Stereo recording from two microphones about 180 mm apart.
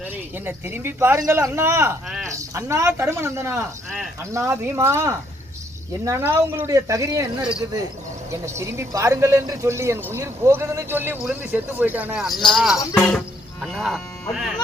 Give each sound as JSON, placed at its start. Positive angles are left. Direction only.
{"t": 0.0, "sound": "speech", "side_deg": -10}
{"t": 8.3, "sound": "speech", "side_deg": -15}
{"t": 12.9, "sound": "music", "side_deg": 5}